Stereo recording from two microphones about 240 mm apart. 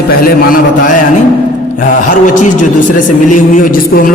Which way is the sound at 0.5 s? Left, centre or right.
Left.